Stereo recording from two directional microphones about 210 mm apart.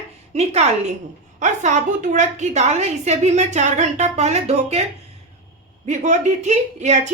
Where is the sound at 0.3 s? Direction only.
30° right (ahead or behind).